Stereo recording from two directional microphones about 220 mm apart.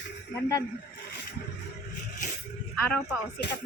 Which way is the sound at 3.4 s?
50° left (ahead or behind).